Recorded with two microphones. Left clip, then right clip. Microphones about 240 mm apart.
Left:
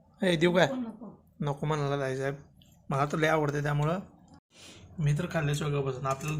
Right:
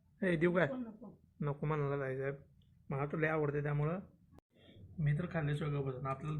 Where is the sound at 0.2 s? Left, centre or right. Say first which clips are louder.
Left 8 dB; centre.